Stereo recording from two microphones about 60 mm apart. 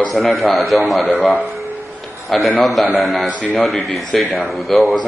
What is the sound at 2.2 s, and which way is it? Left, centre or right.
A man's voice, centre.